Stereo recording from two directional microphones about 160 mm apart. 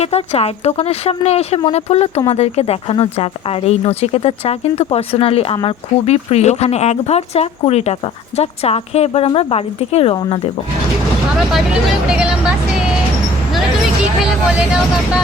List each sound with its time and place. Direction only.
0.0 s speech: 40° left (ahead or behind)
11.3 s speech: 5° right (ahead or behind)
14.2 s speech: 5° right (ahead or behind)